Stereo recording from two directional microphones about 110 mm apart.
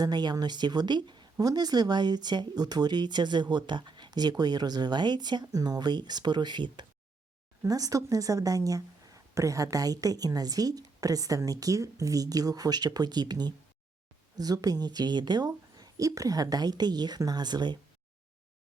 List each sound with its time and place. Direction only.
0.0 s speech: 40° right (ahead or behind)
7.7 s speech: 35° right (ahead or behind)